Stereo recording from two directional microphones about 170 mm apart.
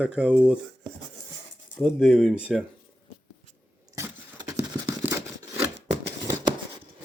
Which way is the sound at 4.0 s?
20° right (ahead or behind).